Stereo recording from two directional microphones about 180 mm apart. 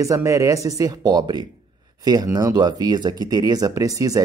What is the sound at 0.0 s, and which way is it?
Speech, 15° right (ahead or behind).